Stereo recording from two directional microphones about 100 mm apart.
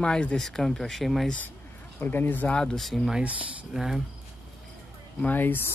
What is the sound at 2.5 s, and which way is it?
Speech, 5° left (ahead or behind).